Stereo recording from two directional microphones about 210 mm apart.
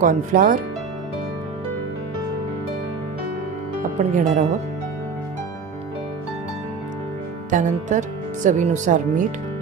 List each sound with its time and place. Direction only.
0.0 s speech: 40° right (ahead or behind)
3.9 s speech: 35° right (ahead or behind)
7.5 s speech: 35° right (ahead or behind)